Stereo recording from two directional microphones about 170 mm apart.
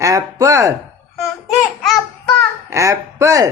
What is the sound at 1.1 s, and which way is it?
Babbling, centre (ahead or behind).